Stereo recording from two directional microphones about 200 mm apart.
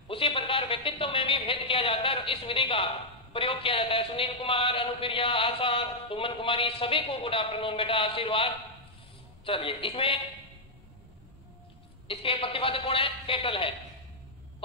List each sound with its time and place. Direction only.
0.1 s a woman's voice: 25° left (ahead or behind)
12.1 s a man's voice: 25° left (ahead or behind)